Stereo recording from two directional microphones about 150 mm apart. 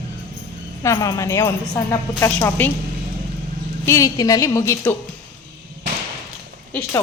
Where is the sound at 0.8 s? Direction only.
20° left (ahead or behind).